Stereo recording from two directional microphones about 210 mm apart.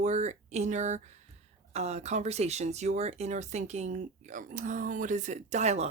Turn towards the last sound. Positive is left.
turn(degrees=-30)  # may be behind; listen again after turning